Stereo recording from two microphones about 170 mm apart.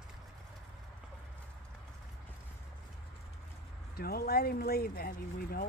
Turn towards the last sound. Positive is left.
turn(degrees=60)  # may be behind; listen again after turning